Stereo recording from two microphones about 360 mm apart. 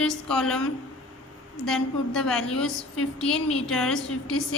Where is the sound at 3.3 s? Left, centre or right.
Centre.